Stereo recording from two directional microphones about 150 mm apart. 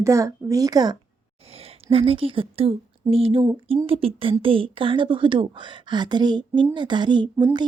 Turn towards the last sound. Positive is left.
turn(degrees=-30)  # may be behind; listen again after turning